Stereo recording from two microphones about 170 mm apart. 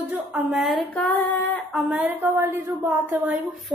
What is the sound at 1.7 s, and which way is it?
A woman's voice, 10° right (ahead or behind).